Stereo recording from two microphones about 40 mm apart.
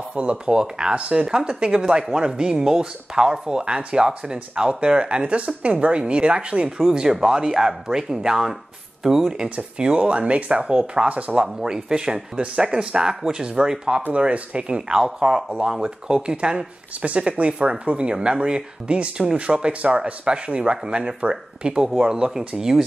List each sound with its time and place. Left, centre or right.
0.1 s speech: right
9.0 s speech: centre
9.8 s speech: right
11.3 s speech: centre
14.1 s speech: right
15.0 s speech: centre
22.6 s speech: centre